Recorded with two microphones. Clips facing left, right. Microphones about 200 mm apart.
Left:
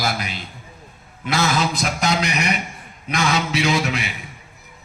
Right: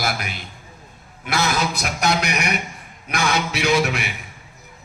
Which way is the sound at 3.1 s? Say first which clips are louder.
Left 2 dB; 60° right (ahead or behind).